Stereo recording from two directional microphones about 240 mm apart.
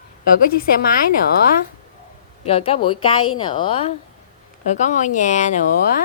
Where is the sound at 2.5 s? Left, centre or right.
Left.